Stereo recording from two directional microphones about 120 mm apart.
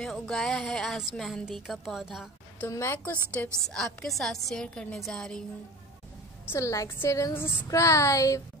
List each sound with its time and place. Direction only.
0.0 s a woman's voice: 5° left (ahead or behind)
2.7 s a woman's voice: 20° left (ahead or behind); by 5.4 s 5° left (ahead or behind)
6.5 s a woman's voice: 25° left (ahead or behind)